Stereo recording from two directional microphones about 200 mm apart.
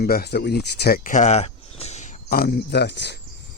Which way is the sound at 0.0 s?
50° left (ahead or behind).